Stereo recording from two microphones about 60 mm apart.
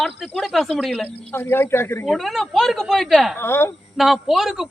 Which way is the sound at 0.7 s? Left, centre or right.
Centre.